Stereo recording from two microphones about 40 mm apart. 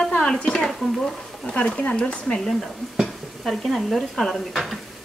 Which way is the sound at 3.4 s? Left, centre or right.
Centre.